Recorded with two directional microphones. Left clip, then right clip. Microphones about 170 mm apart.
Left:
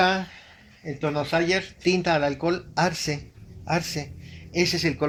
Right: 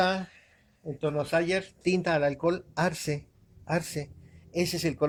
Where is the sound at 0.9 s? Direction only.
65° right (ahead or behind).